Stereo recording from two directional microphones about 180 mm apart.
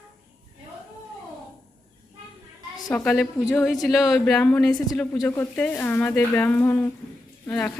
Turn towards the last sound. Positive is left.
turn(degrees=10)  # may be behind; listen again after turning